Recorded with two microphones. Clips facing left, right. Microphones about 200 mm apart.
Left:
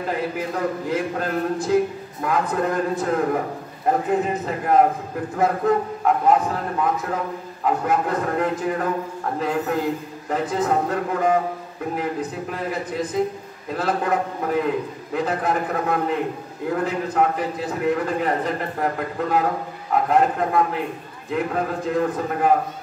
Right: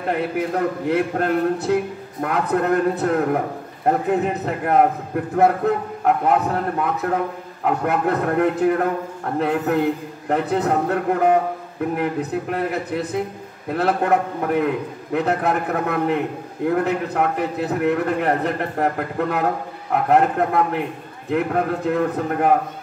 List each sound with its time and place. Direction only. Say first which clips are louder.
0.1 s a man's voice: right 5 dB; 60° right (ahead or behind)